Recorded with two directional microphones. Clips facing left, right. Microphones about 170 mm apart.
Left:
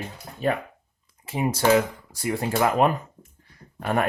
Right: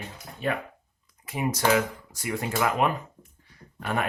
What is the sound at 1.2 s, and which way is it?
Speech, 30° left (ahead or behind).